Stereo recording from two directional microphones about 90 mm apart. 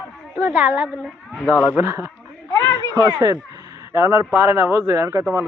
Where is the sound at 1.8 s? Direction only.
30° right (ahead or behind).